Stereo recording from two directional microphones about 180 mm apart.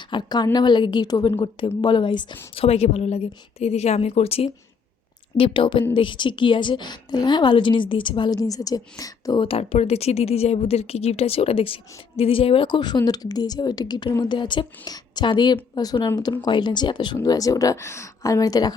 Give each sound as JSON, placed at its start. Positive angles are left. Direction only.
{"t": 0.1, "sound": "a woman's voice", "side_deg": 25}